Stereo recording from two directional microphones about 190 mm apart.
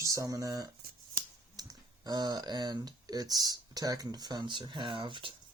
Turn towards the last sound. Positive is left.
turn(degrees=-25)  # may be behind; listen again after turning